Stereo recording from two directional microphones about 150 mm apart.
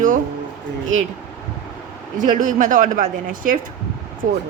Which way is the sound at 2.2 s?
60° right (ahead or behind).